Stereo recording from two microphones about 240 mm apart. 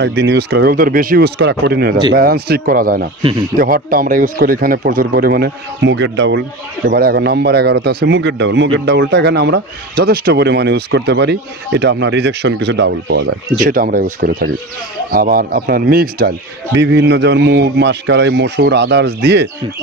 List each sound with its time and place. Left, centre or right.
0.0 s speech: right